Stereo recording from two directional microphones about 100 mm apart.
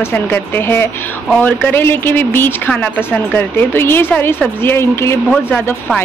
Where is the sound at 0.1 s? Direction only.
20° left (ahead or behind).